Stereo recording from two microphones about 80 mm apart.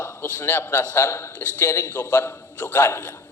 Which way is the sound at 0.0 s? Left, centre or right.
Left.